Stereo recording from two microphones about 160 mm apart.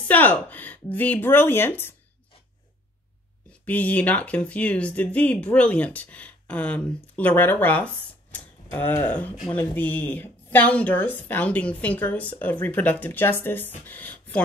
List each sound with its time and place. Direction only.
0.1 s speech: 10° left (ahead or behind)
3.6 s speech: 10° left (ahead or behind)